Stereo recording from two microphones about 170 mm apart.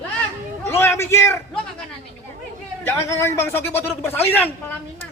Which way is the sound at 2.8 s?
15° left (ahead or behind).